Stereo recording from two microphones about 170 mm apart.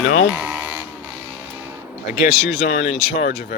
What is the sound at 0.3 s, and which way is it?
Sheep, 10° right (ahead or behind).